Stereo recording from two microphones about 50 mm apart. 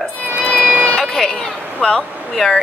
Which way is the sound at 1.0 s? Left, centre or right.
Centre.